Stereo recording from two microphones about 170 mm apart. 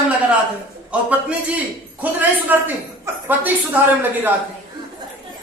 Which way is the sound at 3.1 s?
15° right (ahead or behind).